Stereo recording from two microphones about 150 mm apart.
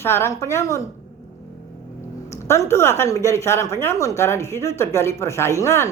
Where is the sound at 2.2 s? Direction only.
20° left (ahead or behind).